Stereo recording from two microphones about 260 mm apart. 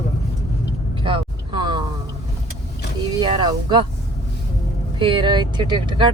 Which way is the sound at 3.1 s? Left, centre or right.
Centre.